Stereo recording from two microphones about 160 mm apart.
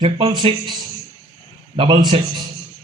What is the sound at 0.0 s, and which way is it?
Speech, 35° right (ahead or behind).